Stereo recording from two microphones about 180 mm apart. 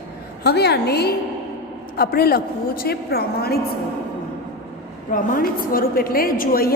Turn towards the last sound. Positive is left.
turn(degrees=55)  # may be behind; listen again after turning